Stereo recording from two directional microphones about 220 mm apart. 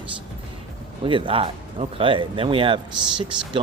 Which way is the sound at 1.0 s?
25° right (ahead or behind).